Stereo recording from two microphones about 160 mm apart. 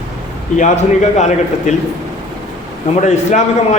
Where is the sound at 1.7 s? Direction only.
45° left (ahead or behind).